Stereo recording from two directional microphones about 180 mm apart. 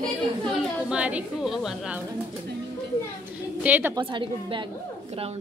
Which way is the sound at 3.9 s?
25° right (ahead or behind).